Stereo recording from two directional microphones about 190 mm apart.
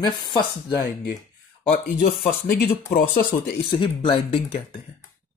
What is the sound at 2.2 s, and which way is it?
Speech, 55° left (ahead or behind).